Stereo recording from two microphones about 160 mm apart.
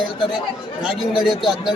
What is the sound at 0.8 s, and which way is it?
Speech, centre (ahead or behind).